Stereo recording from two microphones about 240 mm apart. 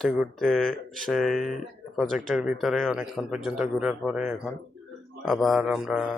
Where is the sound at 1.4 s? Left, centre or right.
Left.